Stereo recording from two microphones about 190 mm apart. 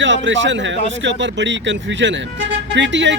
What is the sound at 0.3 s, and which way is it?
Speech, 75° right (ahead or behind).